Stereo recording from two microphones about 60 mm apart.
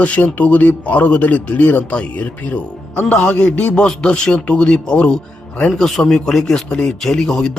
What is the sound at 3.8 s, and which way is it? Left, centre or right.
A man's voice, centre.